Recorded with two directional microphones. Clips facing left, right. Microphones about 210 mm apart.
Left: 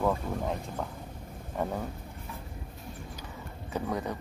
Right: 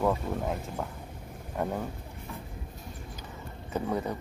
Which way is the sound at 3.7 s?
10° right (ahead or behind).